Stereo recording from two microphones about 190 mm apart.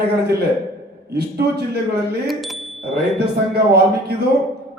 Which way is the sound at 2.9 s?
55° right (ahead or behind).